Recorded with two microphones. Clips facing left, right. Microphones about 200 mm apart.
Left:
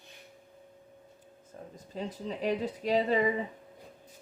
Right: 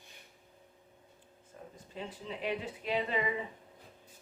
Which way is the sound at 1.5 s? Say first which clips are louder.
Left 5 dB; 40° left (ahead or behind).